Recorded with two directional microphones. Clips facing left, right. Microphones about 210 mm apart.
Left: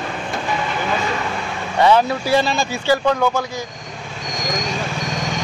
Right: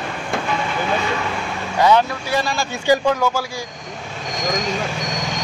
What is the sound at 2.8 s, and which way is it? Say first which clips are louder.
Speech: right 1 dB; 10° right (ahead or behind).